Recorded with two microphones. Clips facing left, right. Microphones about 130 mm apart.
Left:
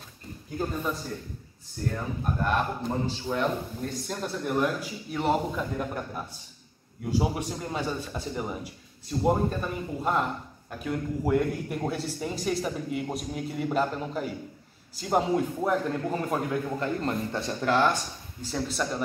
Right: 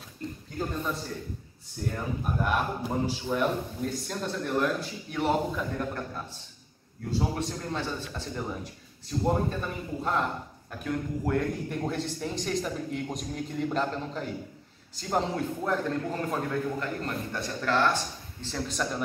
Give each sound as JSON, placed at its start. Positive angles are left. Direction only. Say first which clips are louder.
{"t": 1.9, "sound": "a man's voice", "louder": "left 1 dB", "side_deg": -5}
{"t": 17.0, "sound": "speech", "louder": "left 4 dB", "side_deg": 25}
{"t": 18.4, "sound": "a man's voice", "louder": "left 2 dB", "side_deg": 5}